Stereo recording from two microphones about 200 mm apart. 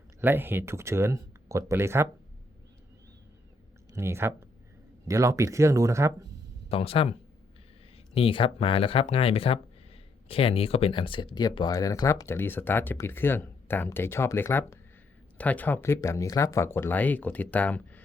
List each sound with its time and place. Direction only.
0.2 s speech: 10° right (ahead or behind)
3.9 s speech: 15° right (ahead or behind)
6.7 s speech: 30° left (ahead or behind); by 18.0 s 5° left (ahead or behind)